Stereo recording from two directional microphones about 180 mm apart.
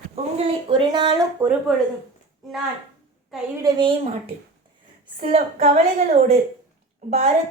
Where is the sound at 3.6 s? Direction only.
25° right (ahead or behind).